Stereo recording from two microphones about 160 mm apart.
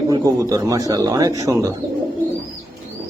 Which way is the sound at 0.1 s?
20° right (ahead or behind).